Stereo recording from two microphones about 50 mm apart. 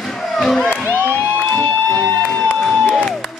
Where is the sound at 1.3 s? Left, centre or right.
Left.